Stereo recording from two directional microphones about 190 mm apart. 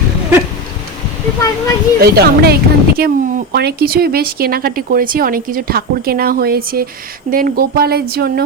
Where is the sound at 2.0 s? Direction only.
55° right (ahead or behind).